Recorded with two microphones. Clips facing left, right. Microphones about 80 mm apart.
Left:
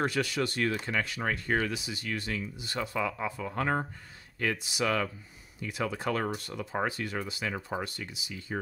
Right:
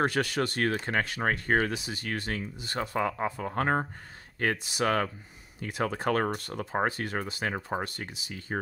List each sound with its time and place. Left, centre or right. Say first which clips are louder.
0.0 s speech: right 2 dB; right